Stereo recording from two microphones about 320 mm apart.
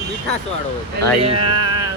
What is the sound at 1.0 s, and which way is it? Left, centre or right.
Speech, right.